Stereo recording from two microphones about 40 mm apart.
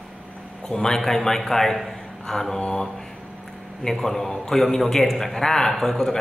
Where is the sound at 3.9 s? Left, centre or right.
Centre.